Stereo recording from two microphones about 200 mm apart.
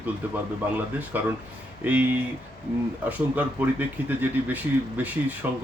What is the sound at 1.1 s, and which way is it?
Speech, 10° right (ahead or behind).